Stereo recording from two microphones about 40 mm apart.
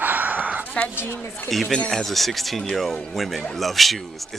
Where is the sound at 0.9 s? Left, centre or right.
Left.